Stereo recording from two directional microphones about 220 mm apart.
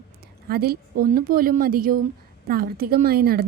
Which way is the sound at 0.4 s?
45° right (ahead or behind).